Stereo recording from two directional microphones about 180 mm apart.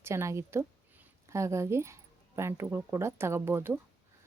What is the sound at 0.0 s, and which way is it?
A woman's voice, 15° right (ahead or behind).